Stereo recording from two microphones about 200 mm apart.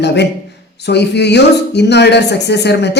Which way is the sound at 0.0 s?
60° left (ahead or behind).